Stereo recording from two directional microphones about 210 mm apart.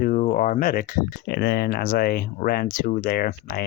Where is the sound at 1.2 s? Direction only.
50° left (ahead or behind).